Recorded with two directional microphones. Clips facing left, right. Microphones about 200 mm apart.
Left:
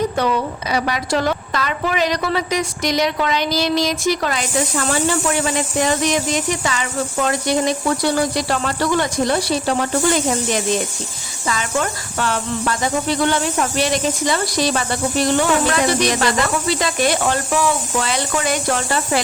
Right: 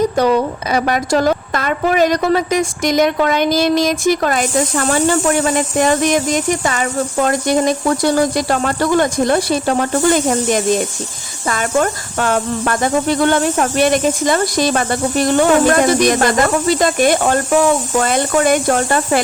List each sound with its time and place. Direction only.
0.2 s a woman's voice: 45° right (ahead or behind)